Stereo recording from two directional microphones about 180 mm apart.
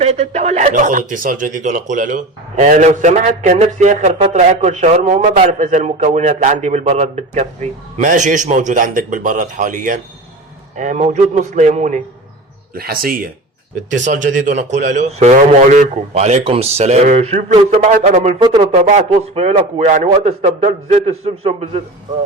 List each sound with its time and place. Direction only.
0.0 s a man's voice: 35° right (ahead or behind)
12.7 s a man's voice: 55° right (ahead or behind); by 18.4 s 40° right (ahead or behind)
18.4 s speech: 25° right (ahead or behind)
18.8 s a man's voice: 40° right (ahead or behind)